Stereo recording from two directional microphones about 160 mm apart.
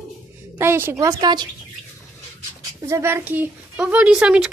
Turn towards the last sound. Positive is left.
turn(degrees=-5)  # may be behind; listen again after turning